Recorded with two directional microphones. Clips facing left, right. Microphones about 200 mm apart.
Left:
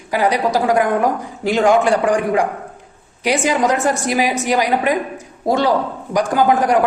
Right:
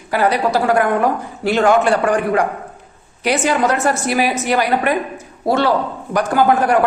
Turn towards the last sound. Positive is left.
turn(degrees=15)  # may be behind; listen again after turning